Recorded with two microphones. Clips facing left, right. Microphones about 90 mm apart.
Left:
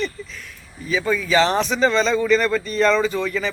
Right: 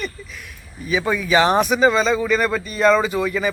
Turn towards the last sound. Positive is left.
turn(degrees=-10)  # may be behind; listen again after turning